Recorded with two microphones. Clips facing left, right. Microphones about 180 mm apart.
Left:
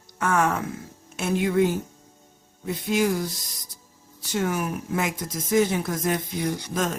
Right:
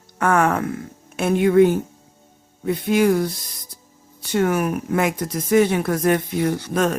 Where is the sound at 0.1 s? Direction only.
60° right (ahead or behind).